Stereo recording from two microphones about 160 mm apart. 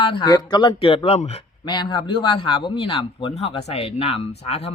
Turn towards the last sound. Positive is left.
turn(degrees=40)  # may be behind; listen again after turning